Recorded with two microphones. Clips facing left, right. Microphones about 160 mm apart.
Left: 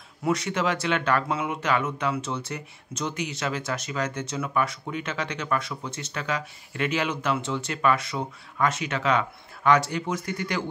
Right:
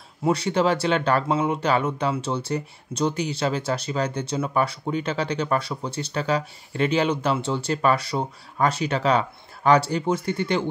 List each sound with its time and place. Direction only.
0.2 s speech: 30° right (ahead or behind)